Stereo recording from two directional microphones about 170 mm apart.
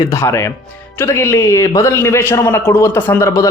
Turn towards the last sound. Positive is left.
turn(degrees=15)  # may be behind; listen again after turning